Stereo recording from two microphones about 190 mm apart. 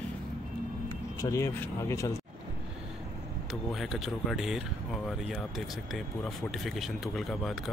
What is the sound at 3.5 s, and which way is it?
Speech, centre (ahead or behind).